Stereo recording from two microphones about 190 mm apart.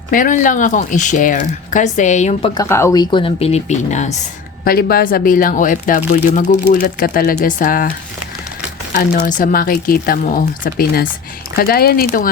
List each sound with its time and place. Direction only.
0.1 s speech: 45° left (ahead or behind)
2.6 s speech: 15° left (ahead or behind); by 4.2 s 40° left (ahead or behind)
4.6 s speech: 50° left (ahead or behind)
9.0 s speech: 50° left (ahead or behind)